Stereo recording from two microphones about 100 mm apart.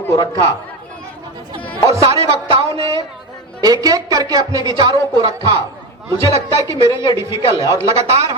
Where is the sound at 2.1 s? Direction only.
80° right.